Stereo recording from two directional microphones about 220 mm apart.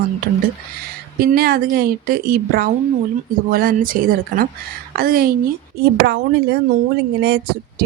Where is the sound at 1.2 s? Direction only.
45° right (ahead or behind).